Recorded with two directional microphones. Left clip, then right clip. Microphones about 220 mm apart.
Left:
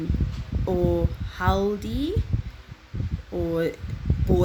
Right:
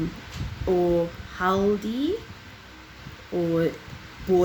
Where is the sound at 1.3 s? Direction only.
35° left (ahead or behind).